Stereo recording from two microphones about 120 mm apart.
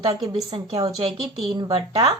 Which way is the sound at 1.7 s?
55° right (ahead or behind).